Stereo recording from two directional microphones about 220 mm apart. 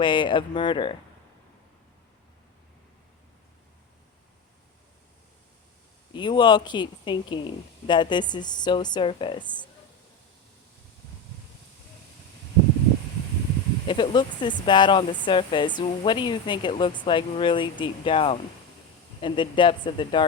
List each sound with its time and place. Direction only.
0.0 s speech: 20° left (ahead or behind)
6.1 s speech: 20° left (ahead or behind)
13.8 s speech: 20° left (ahead or behind)